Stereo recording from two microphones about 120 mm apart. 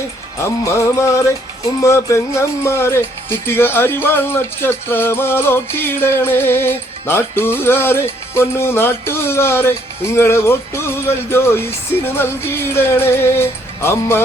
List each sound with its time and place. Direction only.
0.6 s speech: 25° left (ahead or behind)